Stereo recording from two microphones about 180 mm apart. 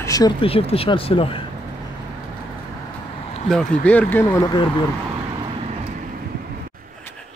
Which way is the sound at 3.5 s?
5° left (ahead or behind).